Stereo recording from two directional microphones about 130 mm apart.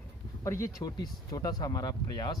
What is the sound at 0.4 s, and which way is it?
Speech, 25° left (ahead or behind).